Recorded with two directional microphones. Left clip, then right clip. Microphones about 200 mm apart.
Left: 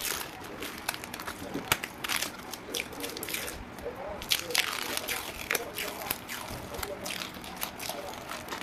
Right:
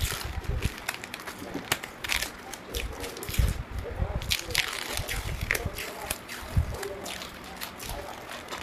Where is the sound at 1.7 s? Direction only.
15° left (ahead or behind).